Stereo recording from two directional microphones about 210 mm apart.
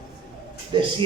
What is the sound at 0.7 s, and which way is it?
Speech, 20° right (ahead or behind).